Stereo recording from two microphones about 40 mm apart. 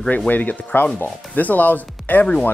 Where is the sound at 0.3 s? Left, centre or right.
Left.